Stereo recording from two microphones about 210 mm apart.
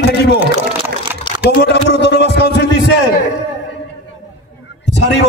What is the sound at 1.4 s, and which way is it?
Music, 55° left (ahead or behind).